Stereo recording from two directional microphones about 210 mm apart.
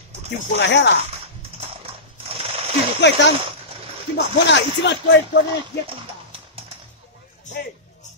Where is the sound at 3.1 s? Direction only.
55° left (ahead or behind).